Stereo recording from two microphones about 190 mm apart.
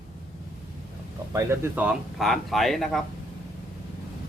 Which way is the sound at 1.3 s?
15° right (ahead or behind).